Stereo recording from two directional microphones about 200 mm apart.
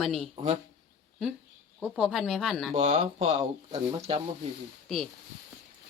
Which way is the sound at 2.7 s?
30° right (ahead or behind).